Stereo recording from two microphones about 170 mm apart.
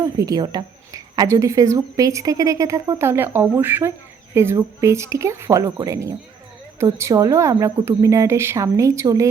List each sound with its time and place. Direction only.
0.0 s a woman's voice: 20° right (ahead or behind)